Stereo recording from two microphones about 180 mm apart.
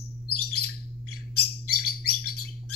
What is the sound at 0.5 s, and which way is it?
Bird, 60° left (ahead or behind).